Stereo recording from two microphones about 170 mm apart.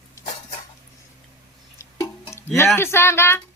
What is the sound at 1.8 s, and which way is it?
Tick-tock, 15° left (ahead or behind).